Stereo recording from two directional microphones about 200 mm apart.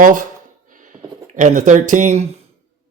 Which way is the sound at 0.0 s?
40° right (ahead or behind).